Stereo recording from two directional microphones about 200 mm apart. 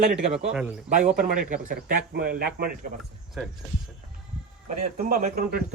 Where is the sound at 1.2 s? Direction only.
45° right (ahead or behind).